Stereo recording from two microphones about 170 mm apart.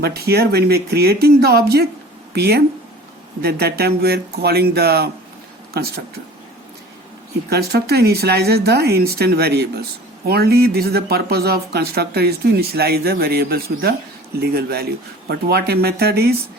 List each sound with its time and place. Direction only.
0.0 s speech: 70° right (ahead or behind)
7.5 s speech: 70° right (ahead or behind)